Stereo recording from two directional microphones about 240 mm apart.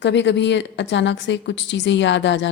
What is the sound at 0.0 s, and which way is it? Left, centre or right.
A woman's voice, left.